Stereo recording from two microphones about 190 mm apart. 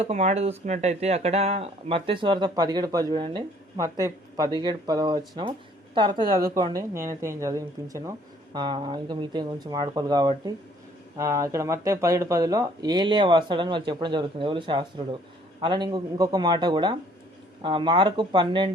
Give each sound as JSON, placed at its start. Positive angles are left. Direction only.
{"t": 0.0, "sound": "speech", "side_deg": -35}